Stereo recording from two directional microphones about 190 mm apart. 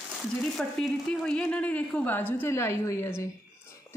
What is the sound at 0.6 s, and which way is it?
A woman's voice, 5° left (ahead or behind).